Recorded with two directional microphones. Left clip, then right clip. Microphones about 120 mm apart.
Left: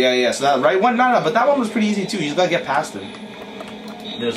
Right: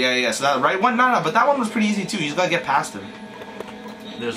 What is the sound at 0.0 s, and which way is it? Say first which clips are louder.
Speech: left 3 dB; 15° right (ahead or behind).